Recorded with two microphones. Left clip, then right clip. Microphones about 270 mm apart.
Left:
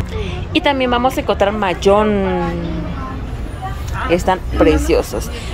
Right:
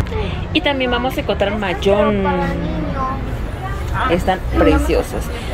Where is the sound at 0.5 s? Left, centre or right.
Centre.